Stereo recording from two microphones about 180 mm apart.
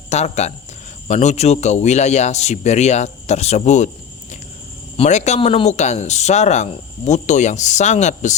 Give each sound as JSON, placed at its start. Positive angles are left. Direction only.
{"t": 0.1, "sound": "speech", "side_deg": 40}
{"t": 4.9, "sound": "speech", "side_deg": 40}